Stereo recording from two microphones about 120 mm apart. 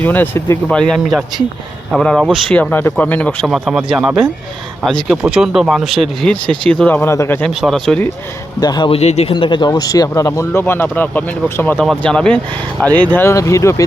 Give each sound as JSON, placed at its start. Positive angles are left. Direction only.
{"t": 0.0, "sound": "speech", "side_deg": 15}
{"t": 0.7, "sound": "speech", "side_deg": 5}
{"t": 3.4, "sound": "speech", "side_deg": 0}
{"t": 6.9, "sound": "speech", "side_deg": 20}
{"t": 7.6, "sound": "speech", "side_deg": 0}
{"t": 8.6, "sound": "speech", "side_deg": 35}
{"t": 8.9, "sound": "speech", "side_deg": 65}
{"t": 9.3, "sound": "speech", "side_deg": 40}
{"t": 11.8, "sound": "speech", "side_deg": 5}
{"t": 13.1, "sound": "speech", "side_deg": 25}